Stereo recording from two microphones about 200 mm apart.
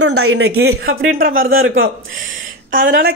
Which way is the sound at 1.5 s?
45° right (ahead or behind).